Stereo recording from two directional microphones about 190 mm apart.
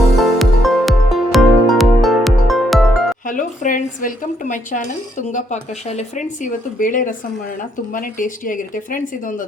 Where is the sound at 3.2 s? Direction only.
45° left (ahead or behind).